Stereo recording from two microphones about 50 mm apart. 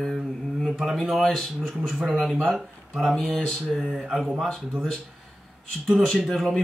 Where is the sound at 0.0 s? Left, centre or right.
Centre.